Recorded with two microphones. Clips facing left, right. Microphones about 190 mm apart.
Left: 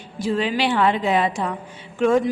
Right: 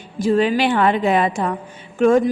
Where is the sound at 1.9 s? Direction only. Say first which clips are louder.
Right 4 dB; 45° right (ahead or behind).